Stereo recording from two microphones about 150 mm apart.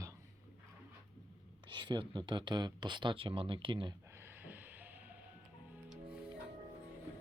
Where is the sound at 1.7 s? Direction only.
30° right (ahead or behind).